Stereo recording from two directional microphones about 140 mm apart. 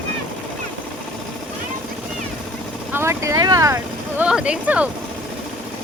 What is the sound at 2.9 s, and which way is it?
Speech, 20° right (ahead or behind).